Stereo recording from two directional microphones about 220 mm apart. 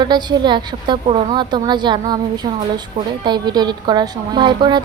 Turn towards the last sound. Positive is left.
turn(degrees=-20)  # may be behind; listen again after turning